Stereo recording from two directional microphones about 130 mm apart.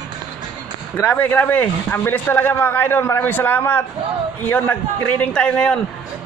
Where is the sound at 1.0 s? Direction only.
15° left (ahead or behind).